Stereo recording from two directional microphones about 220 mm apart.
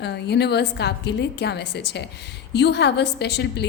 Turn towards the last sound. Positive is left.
turn(degrees=50)  # may be behind; listen again after turning